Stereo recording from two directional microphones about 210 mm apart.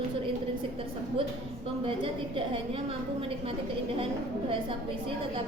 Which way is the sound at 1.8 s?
25° right (ahead or behind).